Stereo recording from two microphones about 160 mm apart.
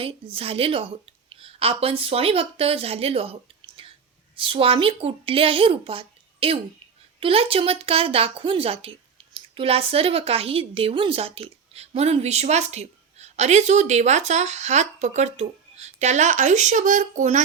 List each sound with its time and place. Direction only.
0.0 s a woman's voice: 35° right (ahead or behind)
3.8 s whispering: 35° right (ahead or behind)
4.4 s a woman's voice: 35° right (ahead or behind); by 17.4 s 50° right (ahead or behind)